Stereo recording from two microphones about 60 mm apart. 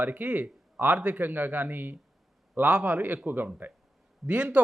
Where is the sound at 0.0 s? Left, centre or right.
Right.